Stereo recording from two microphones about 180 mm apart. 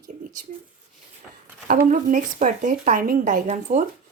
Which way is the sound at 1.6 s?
50° right (ahead or behind).